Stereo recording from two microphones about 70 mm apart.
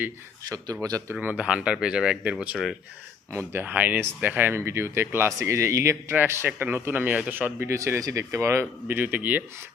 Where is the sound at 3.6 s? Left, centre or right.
Right.